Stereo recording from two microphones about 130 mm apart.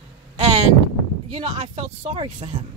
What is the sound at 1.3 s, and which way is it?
Speech, 50° right (ahead or behind).